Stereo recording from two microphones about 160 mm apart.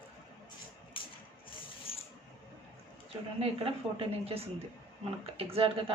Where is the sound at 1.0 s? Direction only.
35° left (ahead or behind).